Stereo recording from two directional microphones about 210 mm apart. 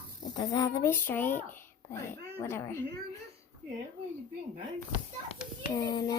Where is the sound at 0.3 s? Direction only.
20° left (ahead or behind).